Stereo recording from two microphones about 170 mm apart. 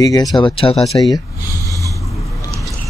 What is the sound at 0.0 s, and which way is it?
Speech, 25° left (ahead or behind).